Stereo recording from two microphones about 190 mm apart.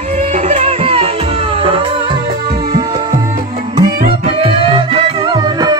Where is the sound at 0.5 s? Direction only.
30° right (ahead or behind).